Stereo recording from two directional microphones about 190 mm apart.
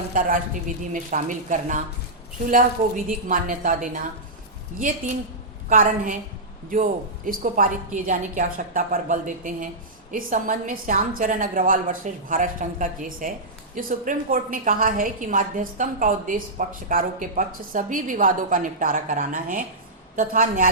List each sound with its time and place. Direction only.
0.1 s a woman's voice: 45° right (ahead or behind)
5.6 s a woman's voice: 45° right (ahead or behind)
7.3 s a woman's voice: 45° right (ahead or behind)